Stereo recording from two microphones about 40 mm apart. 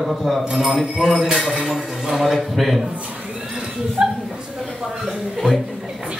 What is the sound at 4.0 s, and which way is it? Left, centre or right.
Speech, right.